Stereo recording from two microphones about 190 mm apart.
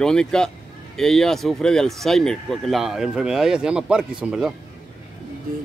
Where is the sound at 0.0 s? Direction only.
5° left (ahead or behind).